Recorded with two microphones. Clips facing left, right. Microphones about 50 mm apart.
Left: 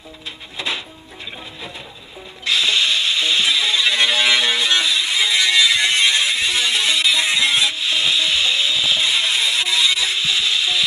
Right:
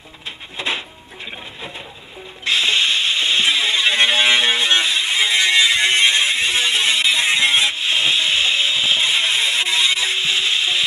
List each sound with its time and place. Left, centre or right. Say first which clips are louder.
0.6 s music: right 2 dB; right
2.4 s music: right 1 dB; right